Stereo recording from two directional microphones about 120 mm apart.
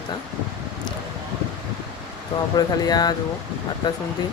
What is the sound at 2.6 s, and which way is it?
Speech, 35° left (ahead or behind).